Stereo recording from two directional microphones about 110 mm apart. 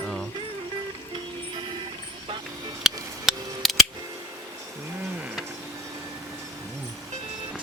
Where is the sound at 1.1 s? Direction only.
55° right (ahead or behind).